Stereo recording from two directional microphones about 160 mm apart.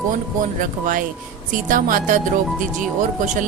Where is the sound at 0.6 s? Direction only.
55° right (ahead or behind).